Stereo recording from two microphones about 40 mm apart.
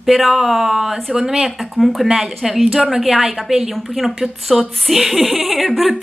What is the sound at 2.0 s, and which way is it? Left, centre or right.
A woman's voice, centre.